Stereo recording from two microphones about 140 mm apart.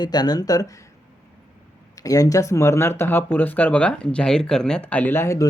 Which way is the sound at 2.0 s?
25° left (ahead or behind).